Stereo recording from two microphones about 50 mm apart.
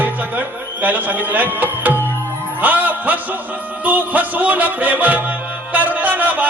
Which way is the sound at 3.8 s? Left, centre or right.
Right.